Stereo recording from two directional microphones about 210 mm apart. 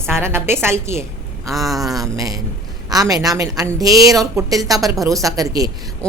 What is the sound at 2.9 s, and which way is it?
A woman's voice, 15° right (ahead or behind).